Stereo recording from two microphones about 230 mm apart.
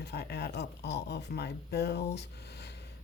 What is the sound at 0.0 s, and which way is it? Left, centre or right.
Speech, left.